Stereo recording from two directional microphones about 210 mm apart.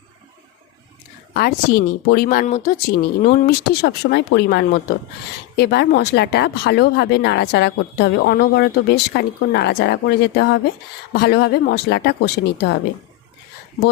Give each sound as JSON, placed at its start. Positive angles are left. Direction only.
{"t": 1.3, "sound": "speech", "side_deg": 50}